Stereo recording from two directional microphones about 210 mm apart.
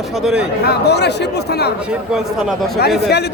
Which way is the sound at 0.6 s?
50° left (ahead or behind).